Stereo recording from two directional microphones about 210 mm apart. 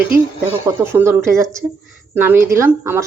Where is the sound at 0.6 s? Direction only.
10° right (ahead or behind).